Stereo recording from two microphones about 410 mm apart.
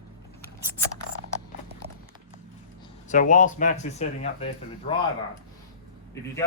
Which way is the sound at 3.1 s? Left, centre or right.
Centre.